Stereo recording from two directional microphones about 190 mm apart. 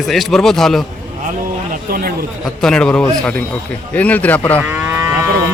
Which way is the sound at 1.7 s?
50° right (ahead or behind).